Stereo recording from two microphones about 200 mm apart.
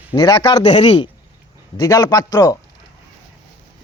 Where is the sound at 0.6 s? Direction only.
35° left (ahead or behind).